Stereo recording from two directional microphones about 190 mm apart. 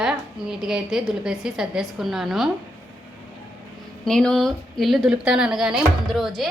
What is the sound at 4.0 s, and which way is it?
A woman's voice, 5° left (ahead or behind).